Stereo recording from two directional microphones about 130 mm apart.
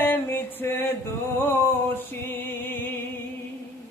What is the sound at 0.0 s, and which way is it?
Music, 15° left (ahead or behind).